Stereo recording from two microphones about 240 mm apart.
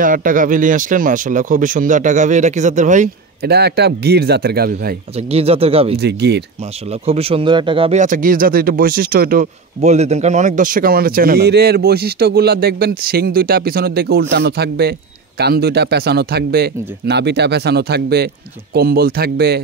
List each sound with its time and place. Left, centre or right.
0.0 s a man's voice: right
5.1 s speech: right
5.9 s a man's voice: right
6.9 s a man's voice: right